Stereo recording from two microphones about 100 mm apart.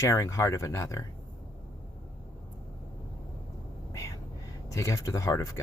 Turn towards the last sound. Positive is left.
turn(degrees=30)  # may be behind; listen again after turning